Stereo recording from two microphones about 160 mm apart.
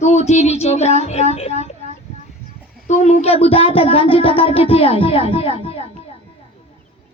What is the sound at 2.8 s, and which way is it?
Speech, 45° left (ahead or behind).